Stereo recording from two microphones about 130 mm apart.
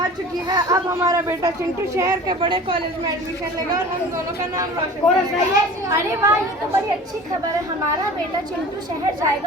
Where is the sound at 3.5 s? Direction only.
25° right (ahead or behind).